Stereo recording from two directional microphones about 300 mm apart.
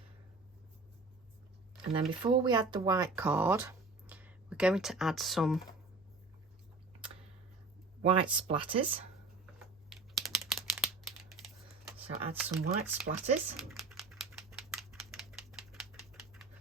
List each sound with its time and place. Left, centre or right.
1.9 s speech: centre
8.0 s speech: centre
9.9 s a sound: centre
12.3 s speech: centre
13.1 s speech: right
13.6 s a sound: centre